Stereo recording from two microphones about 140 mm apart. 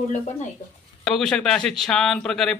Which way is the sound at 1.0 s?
Centre (ahead or behind).